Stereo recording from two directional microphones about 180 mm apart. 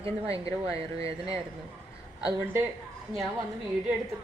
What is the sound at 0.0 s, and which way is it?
Speech, 20° left (ahead or behind).